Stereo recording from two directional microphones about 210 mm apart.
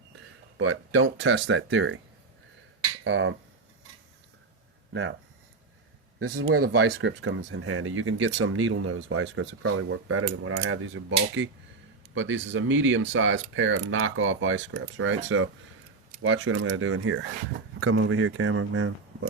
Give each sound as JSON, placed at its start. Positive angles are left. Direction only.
{"t": 0.5, "sound": "speech", "side_deg": -70}
{"t": 3.0, "sound": "speech", "side_deg": -60}
{"t": 6.1, "sound": "speech", "side_deg": -90}
{"t": 6.8, "sound": "speech", "side_deg": -60}